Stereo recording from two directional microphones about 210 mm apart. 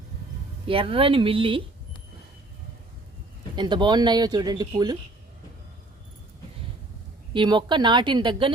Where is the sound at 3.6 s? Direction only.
20° right (ahead or behind).